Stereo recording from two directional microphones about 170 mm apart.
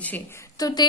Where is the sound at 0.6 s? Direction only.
20° left (ahead or behind).